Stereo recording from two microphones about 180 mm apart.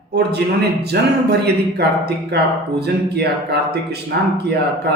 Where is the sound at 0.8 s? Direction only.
65° right (ahead or behind).